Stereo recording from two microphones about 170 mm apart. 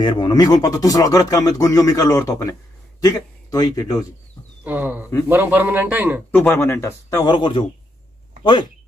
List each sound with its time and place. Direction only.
0.0 s speech: 30° left (ahead or behind)
4.6 s a man's voice: 10° right (ahead or behind)
6.3 s speech: 10° left (ahead or behind); by 7.6 s 30° left (ahead or behind)